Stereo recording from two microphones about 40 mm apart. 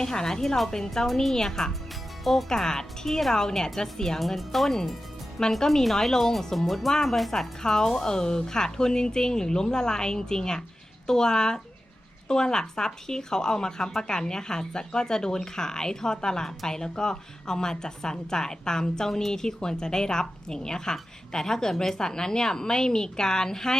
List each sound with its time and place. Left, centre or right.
0.0 s a woman's voice: centre
2.5 s a woman's voice: centre